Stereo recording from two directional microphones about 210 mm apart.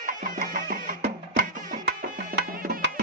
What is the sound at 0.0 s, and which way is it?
Music, 40° right (ahead or behind).